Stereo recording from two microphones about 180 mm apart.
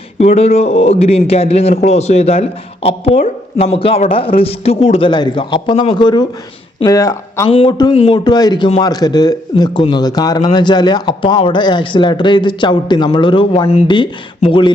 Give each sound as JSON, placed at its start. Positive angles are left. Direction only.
{"t": 0.2, "sound": "a man's voice", "side_deg": 35}
{"t": 7.4, "sound": "a man's voice", "side_deg": 30}